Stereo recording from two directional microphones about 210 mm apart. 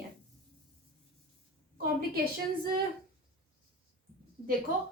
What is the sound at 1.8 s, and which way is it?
Speech, 45° right (ahead or behind).